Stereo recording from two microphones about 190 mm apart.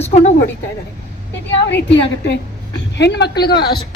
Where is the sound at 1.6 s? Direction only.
65° left (ahead or behind).